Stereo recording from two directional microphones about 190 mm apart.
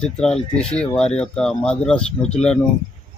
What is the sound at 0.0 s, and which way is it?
Speech, 5° left (ahead or behind).